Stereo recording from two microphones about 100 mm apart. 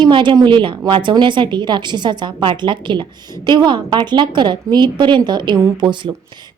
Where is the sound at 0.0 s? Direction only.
50° right (ahead or behind).